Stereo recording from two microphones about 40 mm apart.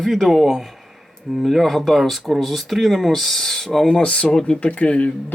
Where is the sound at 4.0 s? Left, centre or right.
Left.